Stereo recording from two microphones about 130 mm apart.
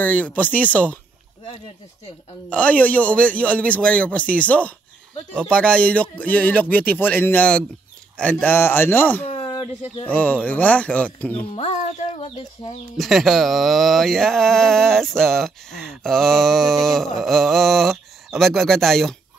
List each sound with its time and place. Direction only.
0.0 s a man's voice: 10° left (ahead or behind)
2.5 s a man's voice: 10° left (ahead or behind)
9.3 s speech: 45° left (ahead or behind)
10.0 s a man's voice: 10° left (ahead or behind)
11.5 s speech: 60° left (ahead or behind)
12.9 s speech: centre (ahead or behind)